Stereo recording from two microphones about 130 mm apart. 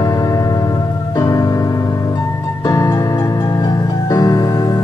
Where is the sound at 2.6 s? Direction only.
25° left (ahead or behind).